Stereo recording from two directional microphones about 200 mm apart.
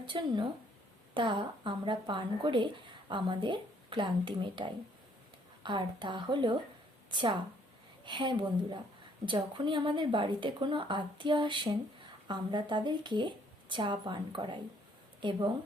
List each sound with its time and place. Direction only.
0.0 s a woman's voice: 25° right (ahead or behind)